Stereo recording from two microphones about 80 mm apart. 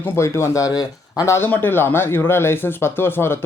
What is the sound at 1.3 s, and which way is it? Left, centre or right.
Speech, left.